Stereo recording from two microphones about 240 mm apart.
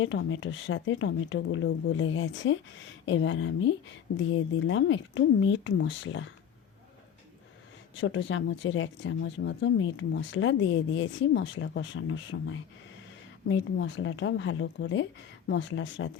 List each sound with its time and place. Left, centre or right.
0.0 s speech: left
7.9 s speech: left